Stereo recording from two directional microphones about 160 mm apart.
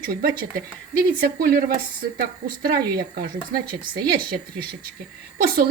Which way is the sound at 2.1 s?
75° right (ahead or behind).